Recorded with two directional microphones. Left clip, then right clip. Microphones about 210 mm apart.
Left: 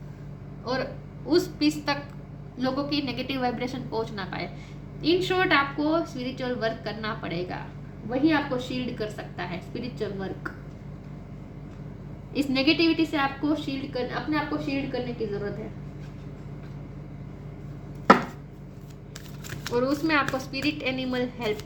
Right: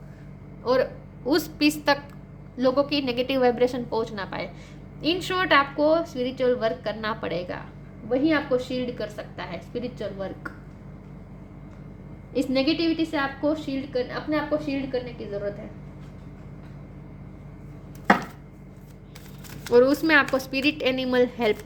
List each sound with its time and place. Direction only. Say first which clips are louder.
0.6 s a woman's voice: right 7 dB; 55° right (ahead or behind); by 10.5 s 35° right (ahead or behind)
12.3 s a woman's voice: even; 25° right (ahead or behind)
19.7 s a woman's voice: right 7 dB; 55° right (ahead or behind)